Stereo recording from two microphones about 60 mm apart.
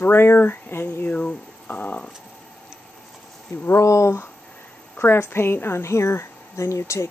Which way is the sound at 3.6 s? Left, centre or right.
Left.